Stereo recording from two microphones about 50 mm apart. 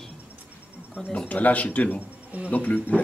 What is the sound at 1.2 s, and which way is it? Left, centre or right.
Speech, left.